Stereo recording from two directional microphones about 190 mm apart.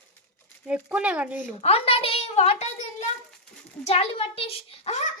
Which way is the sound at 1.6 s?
30° left (ahead or behind).